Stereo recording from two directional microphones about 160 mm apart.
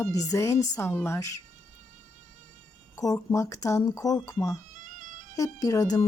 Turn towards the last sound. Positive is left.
turn(degrees=20)  # may be behind; listen again after turning